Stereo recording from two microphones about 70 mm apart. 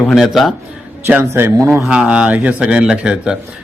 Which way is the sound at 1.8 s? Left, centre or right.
Centre.